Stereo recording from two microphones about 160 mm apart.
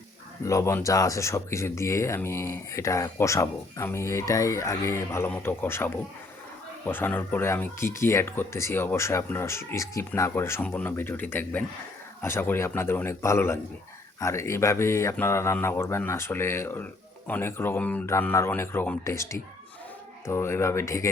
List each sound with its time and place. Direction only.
0.4 s speech: 20° left (ahead or behind)